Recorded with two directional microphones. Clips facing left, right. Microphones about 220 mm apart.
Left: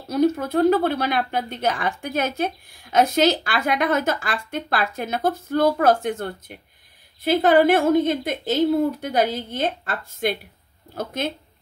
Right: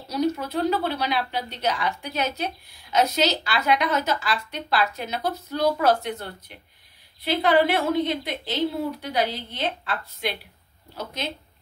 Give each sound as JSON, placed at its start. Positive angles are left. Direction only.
{"t": 0.1, "sound": "speech", "side_deg": 50}